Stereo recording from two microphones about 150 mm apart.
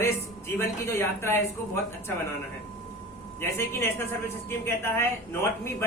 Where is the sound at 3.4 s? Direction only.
15° left (ahead or behind).